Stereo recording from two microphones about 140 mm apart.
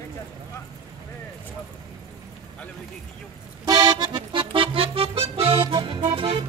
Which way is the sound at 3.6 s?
30° right (ahead or behind).